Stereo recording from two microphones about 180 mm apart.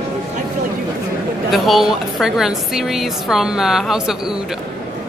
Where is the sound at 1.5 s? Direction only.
Centre (ahead or behind).